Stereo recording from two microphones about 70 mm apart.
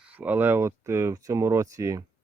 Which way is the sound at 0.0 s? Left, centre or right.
Right.